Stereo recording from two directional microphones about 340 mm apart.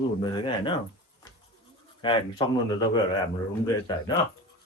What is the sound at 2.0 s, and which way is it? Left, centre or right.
Speech, centre.